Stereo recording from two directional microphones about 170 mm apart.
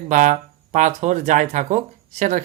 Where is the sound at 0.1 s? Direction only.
45° right (ahead or behind).